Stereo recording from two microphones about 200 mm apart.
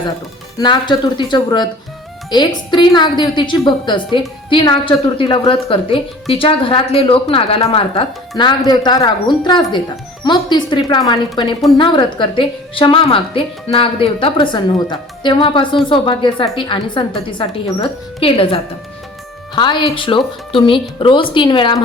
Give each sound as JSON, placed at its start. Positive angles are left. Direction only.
{"t": 0.6, "sound": "a woman's voice", "side_deg": 20}